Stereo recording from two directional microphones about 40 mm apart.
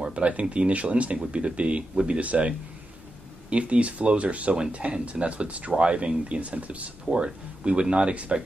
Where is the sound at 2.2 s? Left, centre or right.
Right.